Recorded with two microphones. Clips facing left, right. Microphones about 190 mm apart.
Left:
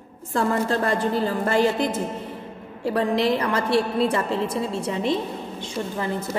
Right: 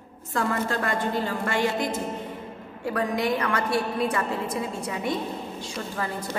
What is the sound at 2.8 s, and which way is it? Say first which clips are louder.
A woman's voice: left 4 dB; 30° left (ahead or behind).